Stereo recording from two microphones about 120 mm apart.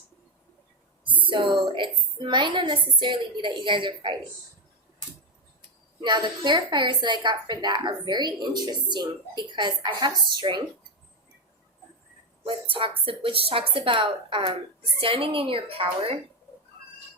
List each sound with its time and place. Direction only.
1.3 s a woman's voice: 45° right (ahead or behind)
6.0 s a woman's voice: 40° right (ahead or behind)
12.5 s a woman's voice: 50° right (ahead or behind)